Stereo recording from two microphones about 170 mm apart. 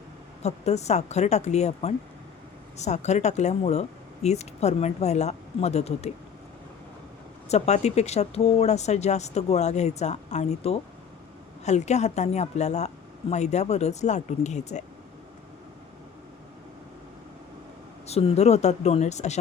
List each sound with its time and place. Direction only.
0.4 s speech: 40° left (ahead or behind)
7.4 s speech: 40° left (ahead or behind)
18.0 s speech: 35° left (ahead or behind)